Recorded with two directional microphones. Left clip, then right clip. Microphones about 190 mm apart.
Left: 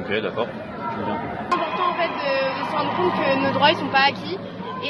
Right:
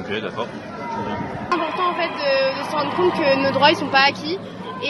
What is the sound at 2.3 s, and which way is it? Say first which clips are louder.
Speech: right 3 dB; 70° right (ahead or behind).